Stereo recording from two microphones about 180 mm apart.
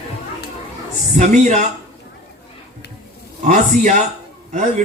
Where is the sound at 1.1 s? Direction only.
40° right (ahead or behind).